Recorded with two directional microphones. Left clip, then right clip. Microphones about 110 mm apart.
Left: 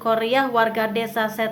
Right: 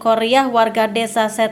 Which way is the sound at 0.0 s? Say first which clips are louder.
Right 5 dB; 30° right (ahead or behind).